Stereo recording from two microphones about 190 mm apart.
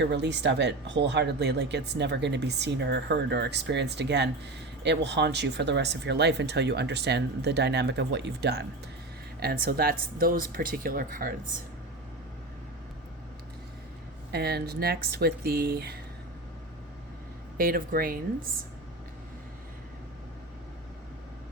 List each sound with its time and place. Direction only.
0.0 s speech: 65° right (ahead or behind); by 11.3 s 50° right (ahead or behind)
14.3 s speech: 60° right (ahead or behind)
17.6 s speech: 50° right (ahead or behind)